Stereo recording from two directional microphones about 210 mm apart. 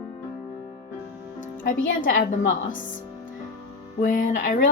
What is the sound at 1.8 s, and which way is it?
Speech, 65° left (ahead or behind).